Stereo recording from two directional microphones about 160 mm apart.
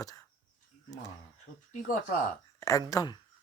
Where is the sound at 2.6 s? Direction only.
20° left (ahead or behind).